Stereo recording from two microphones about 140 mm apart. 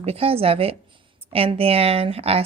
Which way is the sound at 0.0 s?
45° right (ahead or behind).